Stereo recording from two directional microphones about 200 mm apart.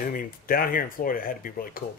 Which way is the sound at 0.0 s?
45° left (ahead or behind).